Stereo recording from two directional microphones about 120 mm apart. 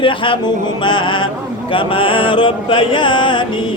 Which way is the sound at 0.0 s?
45° left (ahead or behind).